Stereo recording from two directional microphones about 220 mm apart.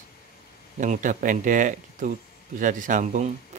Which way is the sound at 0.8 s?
35° right (ahead or behind).